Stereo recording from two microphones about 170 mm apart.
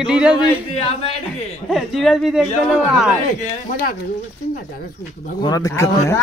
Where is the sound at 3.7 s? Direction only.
55° left (ahead or behind).